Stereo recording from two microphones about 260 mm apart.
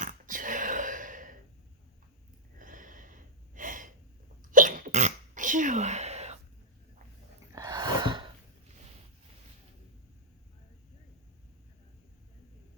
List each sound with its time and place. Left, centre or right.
0.0 s a sound: right
2.6 s gasp: right
4.5 s sneeze: right
7.5 s gasp: centre